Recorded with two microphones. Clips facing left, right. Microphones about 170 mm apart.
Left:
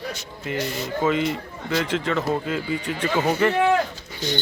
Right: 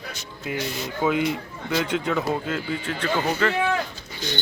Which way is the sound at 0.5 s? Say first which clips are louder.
Left 2 dB; centre (ahead or behind).